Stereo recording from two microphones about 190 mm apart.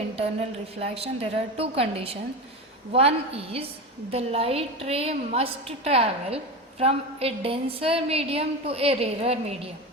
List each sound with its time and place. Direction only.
0.8 s a woman's voice: 30° right (ahead or behind)